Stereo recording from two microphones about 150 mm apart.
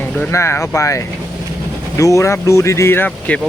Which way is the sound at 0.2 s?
20° left (ahead or behind).